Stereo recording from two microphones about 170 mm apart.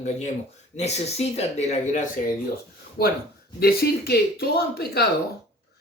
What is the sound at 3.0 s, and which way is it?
Speech, 65° left (ahead or behind).